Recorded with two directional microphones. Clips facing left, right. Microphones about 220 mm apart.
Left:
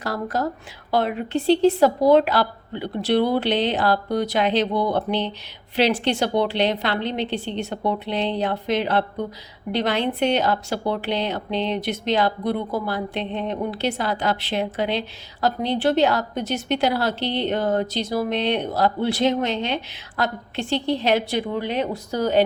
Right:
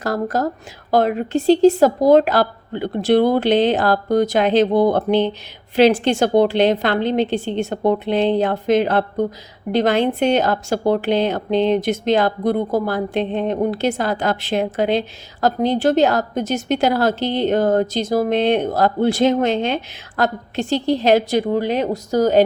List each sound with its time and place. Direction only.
0.0 s a woman's voice: 45° right (ahead or behind)